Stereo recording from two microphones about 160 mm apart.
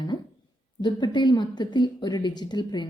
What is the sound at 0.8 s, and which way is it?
A woman's voice, 30° left (ahead or behind).